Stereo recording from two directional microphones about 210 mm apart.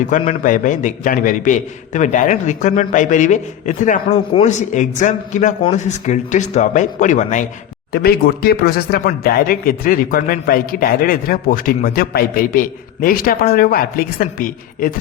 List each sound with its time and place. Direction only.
0.1 s a man's voice: 35° left (ahead or behind)
7.9 s speech: 45° left (ahead or behind)